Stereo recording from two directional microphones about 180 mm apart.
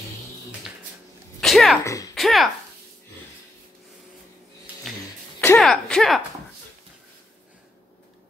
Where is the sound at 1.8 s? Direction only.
15° left (ahead or behind).